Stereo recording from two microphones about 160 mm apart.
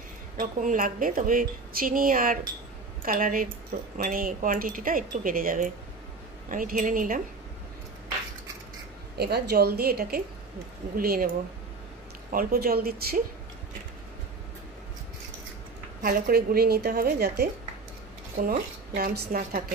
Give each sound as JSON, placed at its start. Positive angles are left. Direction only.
{"t": 0.4, "sound": "a woman's voice", "side_deg": -55}
{"t": 9.2, "sound": "a woman's voice", "side_deg": -90}
{"t": 12.3, "sound": "a woman's voice", "side_deg": -65}
{"t": 16.0, "sound": "a woman's voice", "side_deg": -70}
{"t": 18.4, "sound": "a woman's voice", "side_deg": -65}